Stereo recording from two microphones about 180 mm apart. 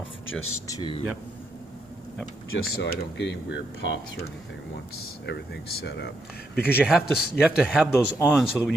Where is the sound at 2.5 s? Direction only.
65° left (ahead or behind).